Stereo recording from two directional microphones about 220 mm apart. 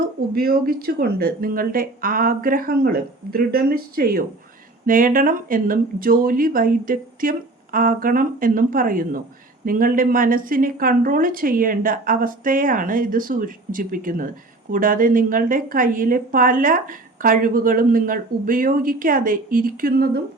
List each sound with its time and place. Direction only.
0.3 s a woman's voice: 40° right (ahead or behind)